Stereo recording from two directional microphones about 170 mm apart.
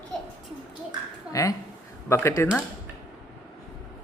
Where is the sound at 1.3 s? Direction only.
20° left (ahead or behind).